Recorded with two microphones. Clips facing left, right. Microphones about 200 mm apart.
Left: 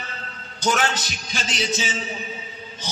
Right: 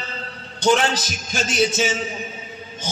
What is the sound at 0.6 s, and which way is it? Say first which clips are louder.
Speech: right 5 dB; 30° right (ahead or behind).